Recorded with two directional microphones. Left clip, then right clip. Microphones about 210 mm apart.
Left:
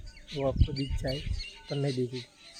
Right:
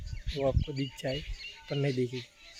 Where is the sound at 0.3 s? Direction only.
15° right (ahead or behind).